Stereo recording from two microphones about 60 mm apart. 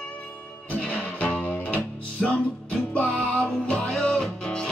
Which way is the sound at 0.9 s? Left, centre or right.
Left.